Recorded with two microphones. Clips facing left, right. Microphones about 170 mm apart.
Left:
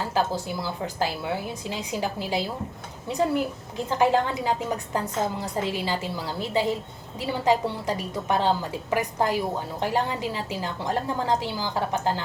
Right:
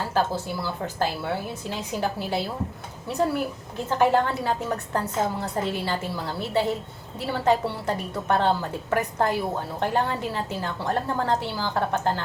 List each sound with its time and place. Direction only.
0.1 s a woman's voice: 15° left (ahead or behind)